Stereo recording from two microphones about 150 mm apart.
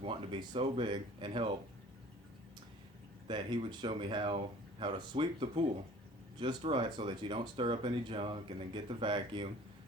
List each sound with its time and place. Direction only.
0.0 s speech: 35° right (ahead or behind)
3.2 s speech: 35° right (ahead or behind)